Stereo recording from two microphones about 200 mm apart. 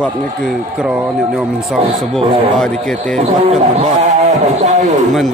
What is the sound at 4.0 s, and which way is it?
Speech, 35° right (ahead or behind).